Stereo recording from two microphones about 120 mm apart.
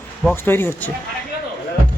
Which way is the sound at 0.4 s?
20° left (ahead or behind).